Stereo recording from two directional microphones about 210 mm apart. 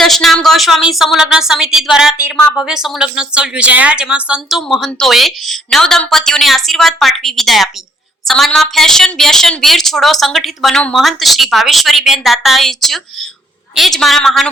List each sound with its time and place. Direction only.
0.0 s speech: centre (ahead or behind)